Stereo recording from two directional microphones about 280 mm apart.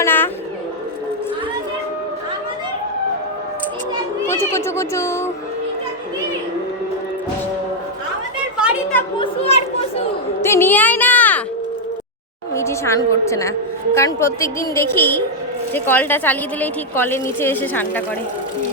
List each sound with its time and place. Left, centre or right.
0.0 s a sound: centre
4.3 s speech: centre
8.5 s a sound: centre
9.1 s children playing: centre
10.4 s music: centre
12.5 s a woman's voice: centre